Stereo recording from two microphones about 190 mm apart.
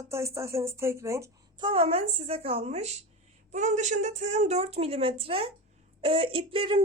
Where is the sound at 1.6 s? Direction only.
30° right (ahead or behind).